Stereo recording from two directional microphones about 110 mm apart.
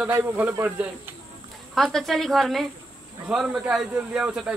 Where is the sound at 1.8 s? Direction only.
Centre (ahead or behind).